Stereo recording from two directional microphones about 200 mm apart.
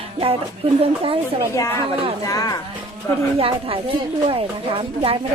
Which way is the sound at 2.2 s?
20° left (ahead or behind).